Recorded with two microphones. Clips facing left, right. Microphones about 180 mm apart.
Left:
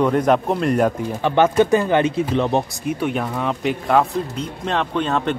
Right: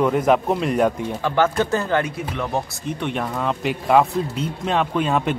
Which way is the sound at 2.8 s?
5° left (ahead or behind).